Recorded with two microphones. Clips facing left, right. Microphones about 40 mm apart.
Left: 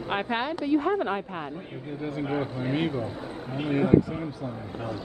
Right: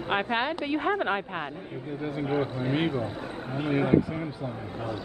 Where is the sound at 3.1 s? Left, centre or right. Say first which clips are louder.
Even; right.